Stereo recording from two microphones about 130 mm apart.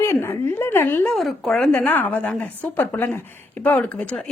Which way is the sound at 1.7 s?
15° left (ahead or behind).